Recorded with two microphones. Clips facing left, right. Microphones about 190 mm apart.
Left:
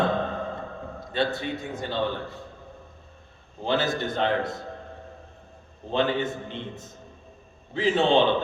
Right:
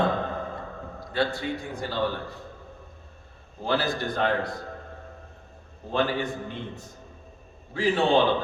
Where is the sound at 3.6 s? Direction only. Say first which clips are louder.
Left 1 dB; 20° left (ahead or behind).